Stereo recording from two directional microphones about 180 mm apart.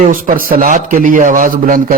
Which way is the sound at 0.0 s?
50° right (ahead or behind).